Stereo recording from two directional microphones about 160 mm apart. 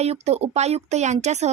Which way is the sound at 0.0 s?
40° right (ahead or behind).